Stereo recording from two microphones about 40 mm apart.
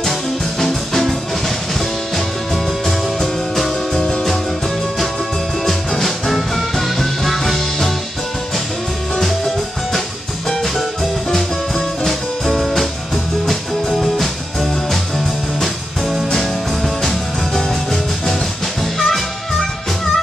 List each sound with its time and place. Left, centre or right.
0.0 s music: centre
4.0 s music: centre
6.0 s music: centre
10.6 s music: centre